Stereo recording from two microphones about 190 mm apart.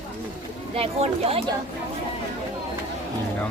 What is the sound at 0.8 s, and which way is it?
Speech, 30° right (ahead or behind).